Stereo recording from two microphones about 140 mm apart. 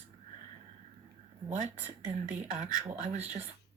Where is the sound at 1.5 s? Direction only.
60° right (ahead or behind).